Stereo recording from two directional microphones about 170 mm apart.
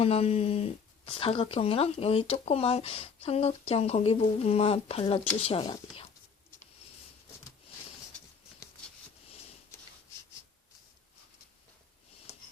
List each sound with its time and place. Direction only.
0.0 s speech: 35° left (ahead or behind)